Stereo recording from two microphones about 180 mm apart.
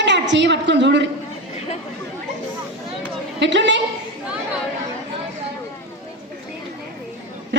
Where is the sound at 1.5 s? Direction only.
40° left (ahead or behind).